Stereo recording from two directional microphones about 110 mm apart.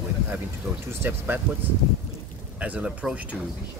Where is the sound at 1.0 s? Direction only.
20° right (ahead or behind).